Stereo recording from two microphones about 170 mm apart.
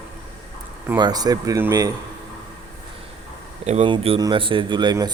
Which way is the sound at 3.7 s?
35° right (ahead or behind).